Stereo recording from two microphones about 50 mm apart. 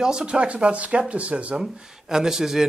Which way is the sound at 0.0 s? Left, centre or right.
Centre.